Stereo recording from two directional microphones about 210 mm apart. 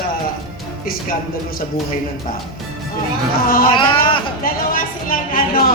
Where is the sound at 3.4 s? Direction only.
45° left (ahead or behind).